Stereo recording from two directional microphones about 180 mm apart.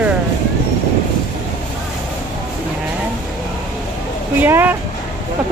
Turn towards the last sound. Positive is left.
turn(degrees=-10)  # may be behind; listen again after turning